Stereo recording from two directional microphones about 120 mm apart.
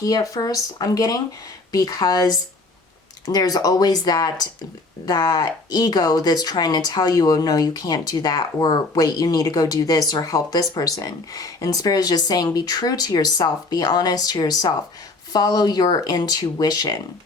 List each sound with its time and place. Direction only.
0.0 s speech: 30° left (ahead or behind)